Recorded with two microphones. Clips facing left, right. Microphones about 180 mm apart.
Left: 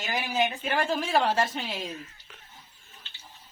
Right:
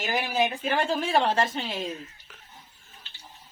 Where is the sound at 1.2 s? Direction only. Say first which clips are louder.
Right 1 dB; centre (ahead or behind).